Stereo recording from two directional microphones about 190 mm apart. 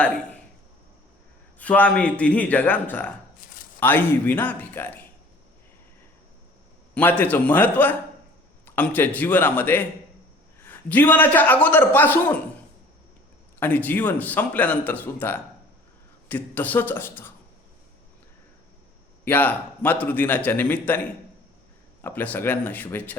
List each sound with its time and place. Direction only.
1.5 s a man's voice: 5° left (ahead or behind)
3.4 s a sound: 50° left (ahead or behind)
3.8 s a man's voice: 10° left (ahead or behind)
6.9 s a man's voice: 10° left (ahead or behind)
13.6 s a man's voice: 10° left (ahead or behind)
19.2 s a man's voice: 10° left (ahead or behind)
22.0 s a man's voice: 10° left (ahead or behind)